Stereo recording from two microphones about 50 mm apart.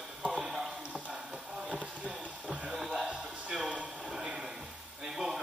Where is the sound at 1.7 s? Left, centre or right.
Centre.